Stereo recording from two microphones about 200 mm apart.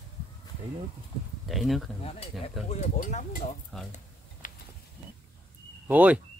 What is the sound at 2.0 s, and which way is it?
Speech, 30° left (ahead or behind).